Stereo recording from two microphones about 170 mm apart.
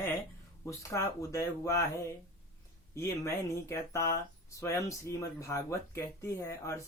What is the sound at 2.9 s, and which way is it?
Speech, 15° left (ahead or behind).